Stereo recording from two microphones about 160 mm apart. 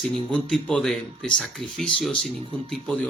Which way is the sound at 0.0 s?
5° left (ahead or behind).